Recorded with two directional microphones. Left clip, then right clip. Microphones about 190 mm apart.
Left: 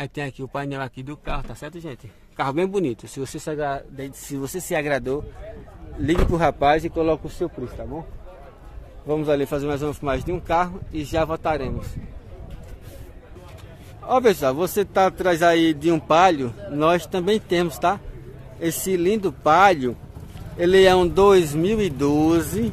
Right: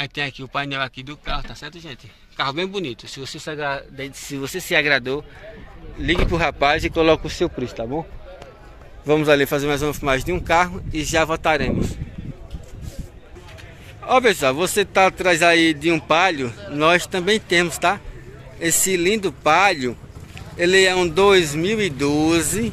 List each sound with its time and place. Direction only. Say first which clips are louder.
0.0 s speech: right 5 dB; 35° left (ahead or behind)
3.5 s speech: right 1 dB; 25° left (ahead or behind)
6.3 s a man's voice: left 1 dB; 15° left (ahead or behind)
7.2 s a man's voice: right 5 dB; 15° right (ahead or behind)
9.0 s a man's voice: right 6 dB; 10° right (ahead or behind)
14.0 s a man's voice: right 2 dB; 5° left (ahead or behind)